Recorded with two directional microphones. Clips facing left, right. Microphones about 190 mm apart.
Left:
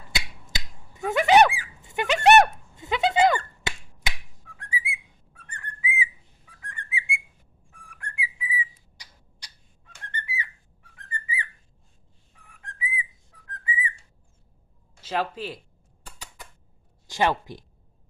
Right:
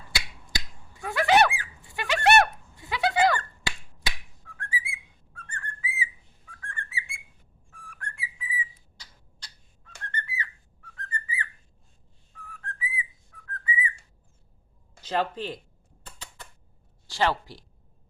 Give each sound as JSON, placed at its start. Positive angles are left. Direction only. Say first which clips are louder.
{"t": 0.1, "sound": "finger snapping", "louder": "left 1 dB", "side_deg": 20}
{"t": 1.8, "sound": "a sound", "louder": "left 4 dB", "side_deg": 20}
{"t": 4.5, "sound": "whistling", "louder": "left 2 dB", "side_deg": 20}
{"t": 9.0, "sound": "bird", "louder": "even", "side_deg": 15}
{"t": 12.5, "sound": "whistling", "louder": "left 1 dB", "side_deg": 15}
{"t": 15.0, "sound": "speech", "louder": "even", "side_deg": 5}
{"t": 17.1, "sound": "speech", "louder": "left 2 dB", "side_deg": 20}